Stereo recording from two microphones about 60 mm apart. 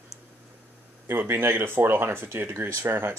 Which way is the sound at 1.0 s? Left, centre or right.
Right.